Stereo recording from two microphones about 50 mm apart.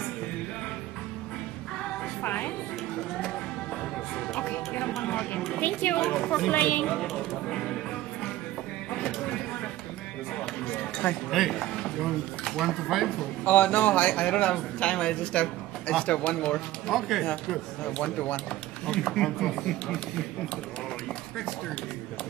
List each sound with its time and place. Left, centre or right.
2.2 s music: left
4.4 s music: left
5.6 s a woman's voice: left
6.0 s speech: centre
6.5 s a woman's voice: left
7.0 s a sound: centre
8.9 s a sound: centre
10.7 s a sound: left
11.2 s speech: centre
13.5 s a man's voice: left
18.9 s speech: centre